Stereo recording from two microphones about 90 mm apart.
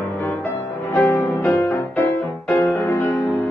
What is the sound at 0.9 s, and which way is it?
Music, 20° left (ahead or behind).